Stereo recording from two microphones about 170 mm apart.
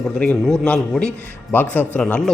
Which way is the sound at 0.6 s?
5° left (ahead or behind).